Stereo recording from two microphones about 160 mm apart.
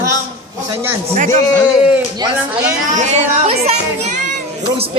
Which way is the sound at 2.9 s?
45° right (ahead or behind).